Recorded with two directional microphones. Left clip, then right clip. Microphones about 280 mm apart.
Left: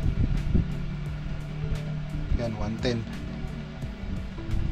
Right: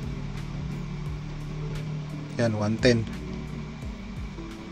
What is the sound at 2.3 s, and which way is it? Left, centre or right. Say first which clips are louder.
Speech: right 6 dB; right.